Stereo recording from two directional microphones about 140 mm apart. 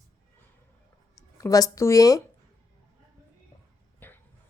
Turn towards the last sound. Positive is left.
turn(degrees=15)  # may be behind; listen again after turning